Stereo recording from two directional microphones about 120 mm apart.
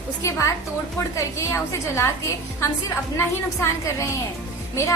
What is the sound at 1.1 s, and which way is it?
A woman's voice, 25° left (ahead or behind).